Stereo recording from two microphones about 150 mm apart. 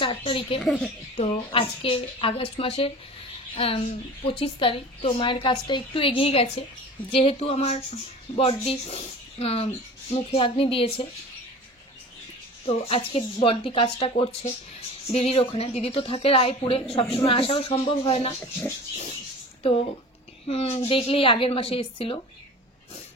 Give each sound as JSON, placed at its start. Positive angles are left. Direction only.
{"t": 0.0, "sound": "a woman's voice", "side_deg": 35}
{"t": 12.6, "sound": "a woman's voice", "side_deg": 40}
{"t": 19.6, "sound": "a woman's voice", "side_deg": 40}